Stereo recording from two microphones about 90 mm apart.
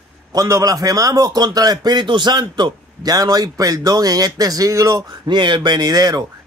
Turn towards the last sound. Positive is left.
turn(degrees=-45)  # may be behind; listen again after turning